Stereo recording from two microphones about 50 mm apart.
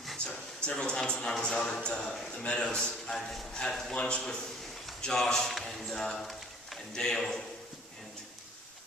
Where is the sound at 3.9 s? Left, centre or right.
Left.